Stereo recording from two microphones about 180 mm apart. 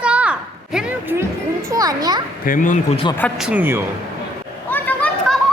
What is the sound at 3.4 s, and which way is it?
Speech, 5° right (ahead or behind).